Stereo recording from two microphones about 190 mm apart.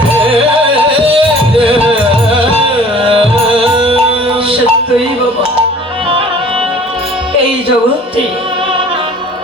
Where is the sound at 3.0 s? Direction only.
30° right (ahead or behind).